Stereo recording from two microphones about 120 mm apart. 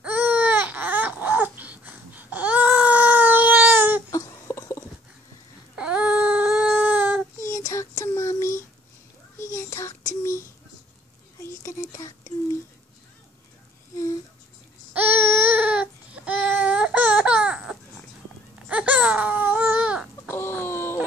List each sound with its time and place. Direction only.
0.0 s baby cry: 10° right (ahead or behind)
4.1 s a sound: 25° left (ahead or behind)
5.8 s baby cry: 10° right (ahead or behind)
7.6 s child singing: 30° left (ahead or behind)
15.0 s baby cry: 15° right (ahead or behind)
20.2 s a sound: 20° left (ahead or behind)